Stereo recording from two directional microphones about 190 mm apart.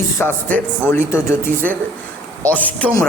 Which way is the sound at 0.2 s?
10° left (ahead or behind).